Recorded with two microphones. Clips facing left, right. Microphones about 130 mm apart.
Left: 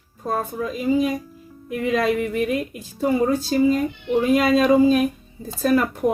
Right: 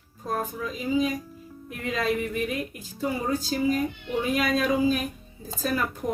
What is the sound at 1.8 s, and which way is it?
Speech, 75° left (ahead or behind).